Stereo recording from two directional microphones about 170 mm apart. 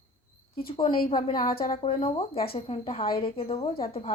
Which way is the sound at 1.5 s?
60° left (ahead or behind).